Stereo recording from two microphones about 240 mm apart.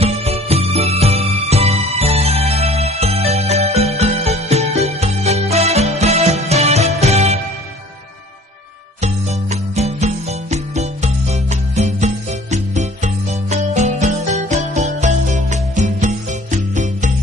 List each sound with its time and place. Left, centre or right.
0.0 s music: right
9.0 s music: right